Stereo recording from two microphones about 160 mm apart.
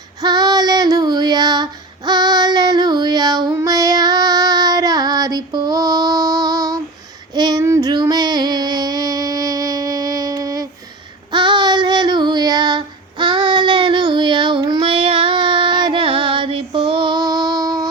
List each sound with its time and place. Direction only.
0.2 s female singing: 25° right (ahead or behind)
7.3 s child singing: 25° right (ahead or behind)